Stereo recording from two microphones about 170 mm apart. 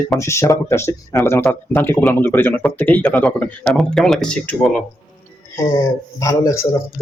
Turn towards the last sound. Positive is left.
turn(degrees=20)  # may be behind; listen again after turning